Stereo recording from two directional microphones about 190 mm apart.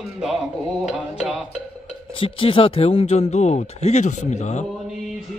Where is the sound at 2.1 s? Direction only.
30° left (ahead or behind).